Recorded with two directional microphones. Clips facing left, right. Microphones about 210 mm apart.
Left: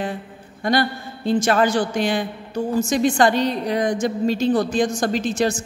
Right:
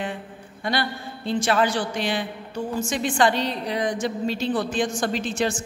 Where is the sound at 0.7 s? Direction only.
45° left (ahead or behind).